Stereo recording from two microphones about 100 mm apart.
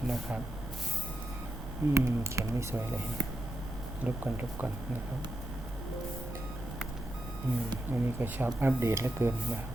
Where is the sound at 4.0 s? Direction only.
15° right (ahead or behind).